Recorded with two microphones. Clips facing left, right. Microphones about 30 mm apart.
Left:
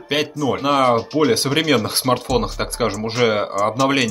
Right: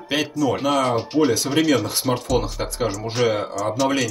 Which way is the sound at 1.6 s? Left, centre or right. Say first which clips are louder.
Left 1 dB; left.